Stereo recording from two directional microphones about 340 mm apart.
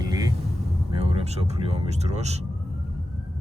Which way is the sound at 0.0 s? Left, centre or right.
Centre.